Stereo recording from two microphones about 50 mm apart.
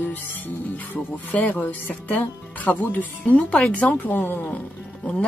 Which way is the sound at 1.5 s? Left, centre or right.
Left.